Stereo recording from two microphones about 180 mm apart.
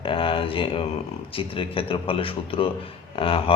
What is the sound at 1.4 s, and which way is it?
A man's voice, 30° left (ahead or behind).